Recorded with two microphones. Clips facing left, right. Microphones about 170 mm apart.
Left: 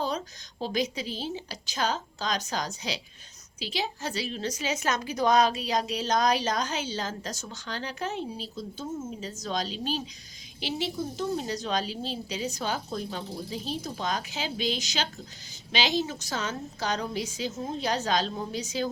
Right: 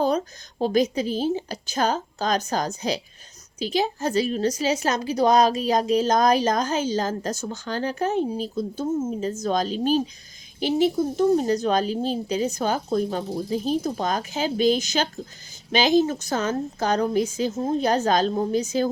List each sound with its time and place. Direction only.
0.6 s a woman's voice: 50° right (ahead or behind)